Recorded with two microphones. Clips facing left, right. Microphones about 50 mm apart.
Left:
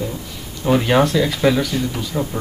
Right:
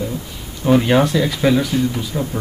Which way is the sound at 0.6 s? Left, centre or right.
Centre.